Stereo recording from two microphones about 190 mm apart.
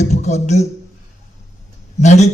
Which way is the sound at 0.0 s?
35° left (ahead or behind).